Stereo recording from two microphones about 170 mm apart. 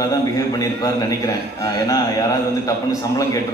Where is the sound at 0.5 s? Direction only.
20° left (ahead or behind).